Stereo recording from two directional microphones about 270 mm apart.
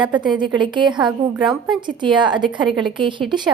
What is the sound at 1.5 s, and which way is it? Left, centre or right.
Speech, centre.